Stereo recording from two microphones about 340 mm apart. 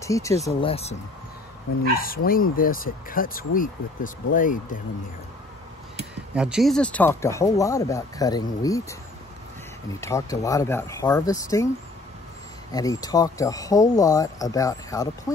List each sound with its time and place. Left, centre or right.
0.0 s speech: centre
2.2 s speech: left
6.3 s speech: centre
9.9 s speech: centre
12.7 s speech: centre